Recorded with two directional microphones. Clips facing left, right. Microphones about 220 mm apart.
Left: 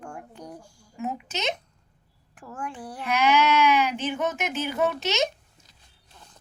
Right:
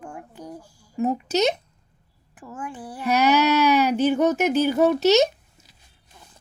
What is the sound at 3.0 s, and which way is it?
Speech, 40° right (ahead or behind).